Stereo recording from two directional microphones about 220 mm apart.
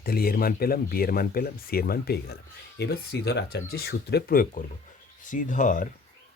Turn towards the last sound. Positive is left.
turn(degrees=35)  # may be behind; listen again after turning